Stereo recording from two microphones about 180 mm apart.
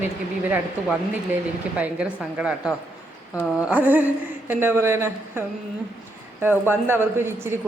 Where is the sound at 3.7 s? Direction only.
10° right (ahead or behind).